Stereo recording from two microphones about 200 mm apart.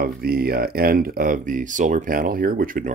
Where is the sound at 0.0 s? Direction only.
50° right (ahead or behind).